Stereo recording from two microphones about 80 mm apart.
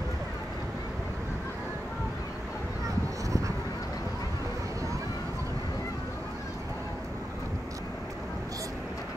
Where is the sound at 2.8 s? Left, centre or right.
Right.